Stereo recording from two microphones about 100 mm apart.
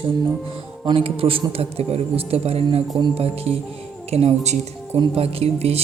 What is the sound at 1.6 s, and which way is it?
Speech, 85° right.